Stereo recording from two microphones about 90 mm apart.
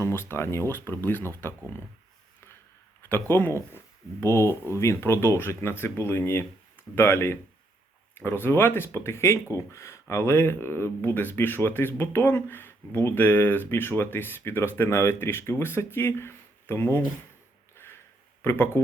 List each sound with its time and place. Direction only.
0.0 s speech: 30° left (ahead or behind)
3.0 s speech: 25° left (ahead or behind)
17.8 s sniff: 25° left (ahead or behind)
18.4 s speech: 25° left (ahead or behind)